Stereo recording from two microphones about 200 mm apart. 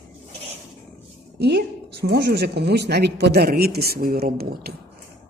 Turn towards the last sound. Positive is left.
turn(degrees=-50)  # may be behind; listen again after turning